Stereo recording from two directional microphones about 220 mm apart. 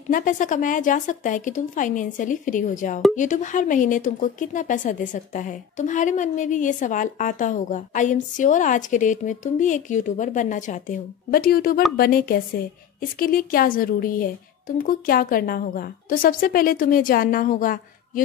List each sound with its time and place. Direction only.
0.1 s speech: 35° left (ahead or behind)